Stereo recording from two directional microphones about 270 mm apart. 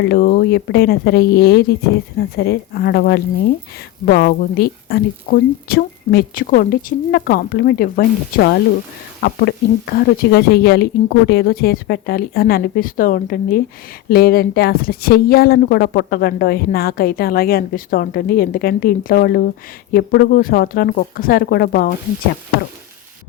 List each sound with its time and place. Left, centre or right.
0.0 s a woman's voice: left